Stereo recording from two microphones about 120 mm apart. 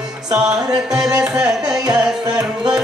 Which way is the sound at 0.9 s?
5° right (ahead or behind).